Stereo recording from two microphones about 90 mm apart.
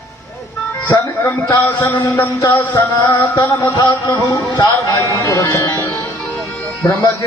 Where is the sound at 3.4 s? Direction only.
45° left (ahead or behind).